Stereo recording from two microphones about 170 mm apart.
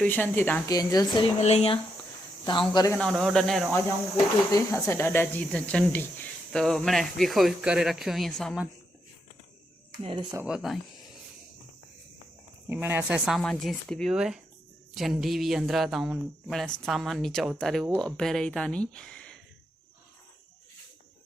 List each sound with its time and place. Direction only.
0.0 s a woman's voice: 10° left (ahead or behind)
0.7 s speech: 20° left (ahead or behind)
1.4 s speech: 40° left (ahead or behind)
2.4 s speech: 25° left (ahead or behind)
3.0 s speech: centre (ahead or behind)
4.5 s speech: 15° left (ahead or behind)
10.0 s speech: 30° right (ahead or behind)
10.4 s speech: 5° right (ahead or behind)
12.6 s speech: 10° right (ahead or behind); by 19.4 s 5° left (ahead or behind)